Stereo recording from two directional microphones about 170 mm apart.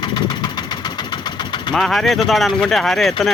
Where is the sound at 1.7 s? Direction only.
Centre (ahead or behind).